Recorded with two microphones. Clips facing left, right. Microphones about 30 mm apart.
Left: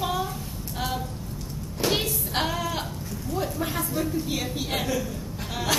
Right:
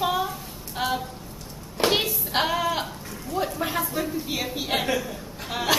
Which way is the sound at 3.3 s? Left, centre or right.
Centre.